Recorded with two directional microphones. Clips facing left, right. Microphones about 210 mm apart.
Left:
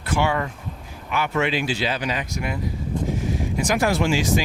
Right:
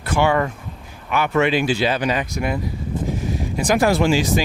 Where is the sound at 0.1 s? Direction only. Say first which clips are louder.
Right 4 dB; 60° right (ahead or behind).